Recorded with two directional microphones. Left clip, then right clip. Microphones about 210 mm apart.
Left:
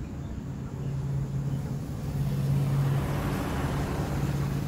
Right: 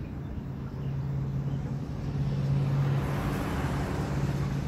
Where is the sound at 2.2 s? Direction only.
60° left (ahead or behind).